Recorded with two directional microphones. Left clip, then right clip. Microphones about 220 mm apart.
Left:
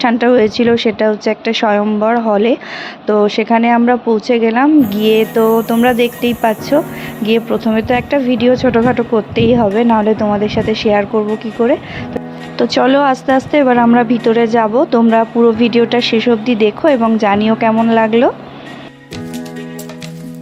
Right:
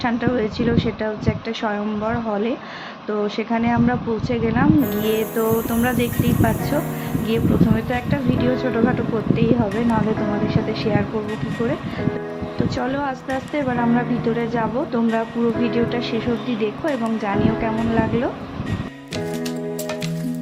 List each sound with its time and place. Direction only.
0.0 s speech: 45° left (ahead or behind)
12.5 s speech: 45° left (ahead or behind)